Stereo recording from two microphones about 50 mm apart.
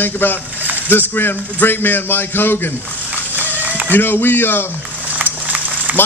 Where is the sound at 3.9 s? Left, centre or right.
Left.